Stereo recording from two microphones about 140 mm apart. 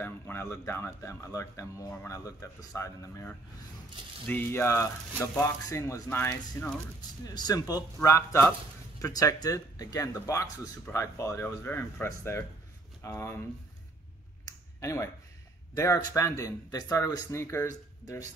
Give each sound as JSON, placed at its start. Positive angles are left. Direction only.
{"t": 0.0, "sound": "speech", "side_deg": 15}
{"t": 14.5, "sound": "finger snapping", "side_deg": 25}
{"t": 14.8, "sound": "speech", "side_deg": 20}